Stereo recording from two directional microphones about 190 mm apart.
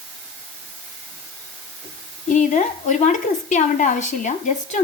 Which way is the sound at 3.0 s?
40° left (ahead or behind).